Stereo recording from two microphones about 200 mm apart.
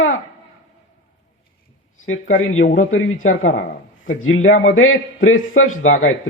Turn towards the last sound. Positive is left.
turn(degrees=90)